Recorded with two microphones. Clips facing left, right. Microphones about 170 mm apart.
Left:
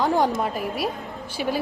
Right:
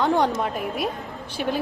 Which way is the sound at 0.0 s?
Centre (ahead or behind).